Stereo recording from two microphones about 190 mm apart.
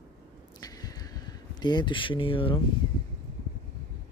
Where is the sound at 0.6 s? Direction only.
20° left (ahead or behind).